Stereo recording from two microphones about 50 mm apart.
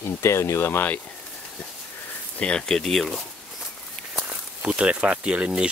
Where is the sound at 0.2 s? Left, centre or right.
Left.